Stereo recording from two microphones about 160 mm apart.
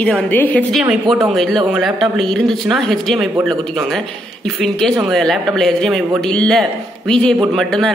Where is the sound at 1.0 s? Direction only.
20° right (ahead or behind).